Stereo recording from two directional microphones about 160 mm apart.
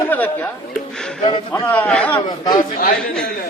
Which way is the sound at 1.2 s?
30° left (ahead or behind).